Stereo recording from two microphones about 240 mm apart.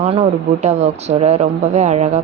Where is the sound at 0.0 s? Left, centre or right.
Right.